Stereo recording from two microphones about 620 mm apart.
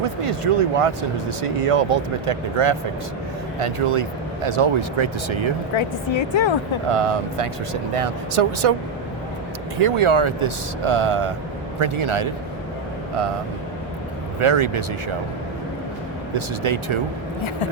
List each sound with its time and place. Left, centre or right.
0.2 s speech: right
5.7 s a woman's voice: left
6.8 s speech: right
9.7 s speech: right
14.3 s speech: right
16.3 s speech: right